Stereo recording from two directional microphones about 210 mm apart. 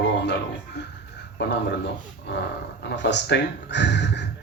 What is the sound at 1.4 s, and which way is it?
Speech, 55° left (ahead or behind).